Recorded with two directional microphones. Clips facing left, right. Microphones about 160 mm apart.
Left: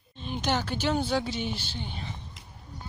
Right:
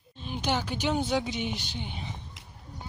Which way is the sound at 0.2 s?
10° right (ahead or behind).